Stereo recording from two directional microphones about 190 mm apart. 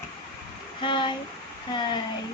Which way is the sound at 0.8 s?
25° left (ahead or behind).